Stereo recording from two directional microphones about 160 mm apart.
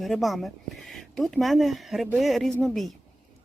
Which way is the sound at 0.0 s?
Centre (ahead or behind).